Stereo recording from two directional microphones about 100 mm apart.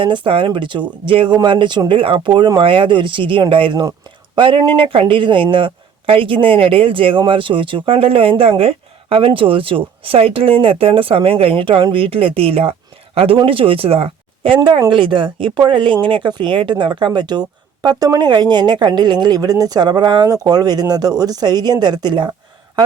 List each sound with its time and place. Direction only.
0.0 s speech: 55° right (ahead or behind)